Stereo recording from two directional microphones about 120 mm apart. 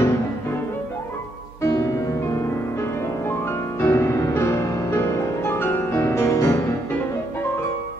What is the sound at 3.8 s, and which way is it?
Music, 20° left (ahead or behind).